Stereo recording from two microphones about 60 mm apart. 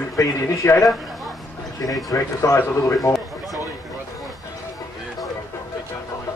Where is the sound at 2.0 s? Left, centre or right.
Left.